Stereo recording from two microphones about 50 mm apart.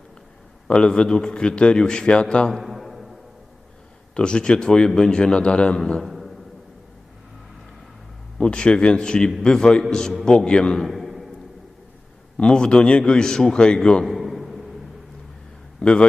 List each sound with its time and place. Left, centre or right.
0.7 s a man's voice: centre
2.5 s a sound: centre
4.1 s a man's voice: centre
5.8 s a man's voice: centre
8.4 s a man's voice: centre
10.8 s a sound: centre
12.4 s a man's voice: centre
14.0 s a sound: centre
15.8 s a man's voice: centre